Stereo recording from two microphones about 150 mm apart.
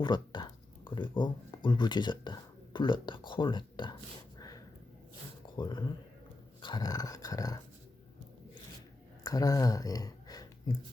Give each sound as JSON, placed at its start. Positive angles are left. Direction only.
{"t": 0.0, "sound": "speech", "side_deg": 30}
{"t": 4.4, "sound": "snort", "side_deg": 25}
{"t": 5.5, "sound": "speech", "side_deg": 30}
{"t": 6.6, "sound": "dog", "side_deg": 30}
{"t": 9.2, "sound": "speech", "side_deg": 25}